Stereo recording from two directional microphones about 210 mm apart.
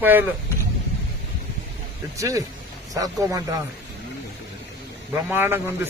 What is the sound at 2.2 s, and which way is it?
Speech, 15° right (ahead or behind).